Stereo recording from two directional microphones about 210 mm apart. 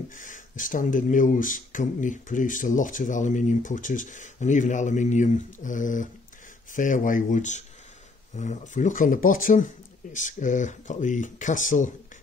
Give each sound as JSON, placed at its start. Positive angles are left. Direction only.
{"t": 0.1, "sound": "speech", "side_deg": 40}